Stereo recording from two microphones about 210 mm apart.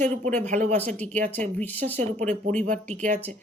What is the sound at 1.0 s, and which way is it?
Speech, 5° left (ahead or behind).